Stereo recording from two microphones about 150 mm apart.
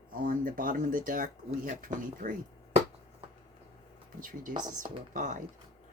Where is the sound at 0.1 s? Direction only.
70° right (ahead or behind).